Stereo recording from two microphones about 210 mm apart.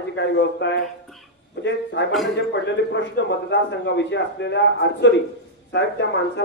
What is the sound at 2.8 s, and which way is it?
A man's voice, 55° left (ahead or behind).